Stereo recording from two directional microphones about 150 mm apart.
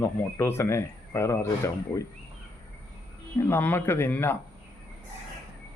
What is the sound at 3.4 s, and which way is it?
A man's voice, 15° left (ahead or behind).